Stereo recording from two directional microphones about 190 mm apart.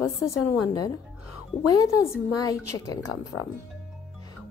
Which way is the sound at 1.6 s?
15° left (ahead or behind).